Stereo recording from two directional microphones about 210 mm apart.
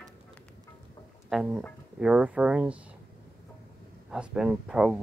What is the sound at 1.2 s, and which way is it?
Speech, 5° right (ahead or behind).